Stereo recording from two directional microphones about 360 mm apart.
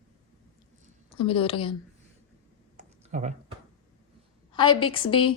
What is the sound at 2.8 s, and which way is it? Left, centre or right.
Computer keyboard, centre.